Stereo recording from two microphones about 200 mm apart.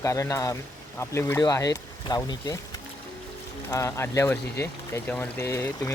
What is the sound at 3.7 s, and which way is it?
Speech, 15° left (ahead or behind).